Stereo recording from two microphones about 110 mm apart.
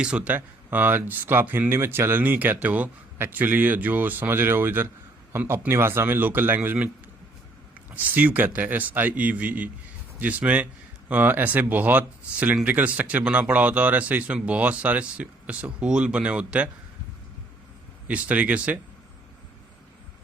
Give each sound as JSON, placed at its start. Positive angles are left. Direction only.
{"t": 0.0, "sound": "speech", "side_deg": -10}
{"t": 7.9, "sound": "speech", "side_deg": -15}
{"t": 18.1, "sound": "speech", "side_deg": -15}